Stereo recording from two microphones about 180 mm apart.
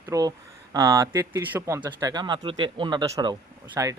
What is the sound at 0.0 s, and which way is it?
Speech, 20° right (ahead or behind).